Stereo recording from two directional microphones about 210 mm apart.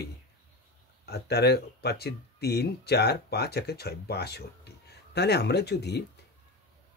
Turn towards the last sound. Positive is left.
turn(degrees=50)  # may be behind; listen again after turning